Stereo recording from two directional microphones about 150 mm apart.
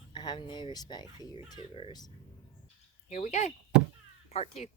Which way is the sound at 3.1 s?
50° left (ahead or behind).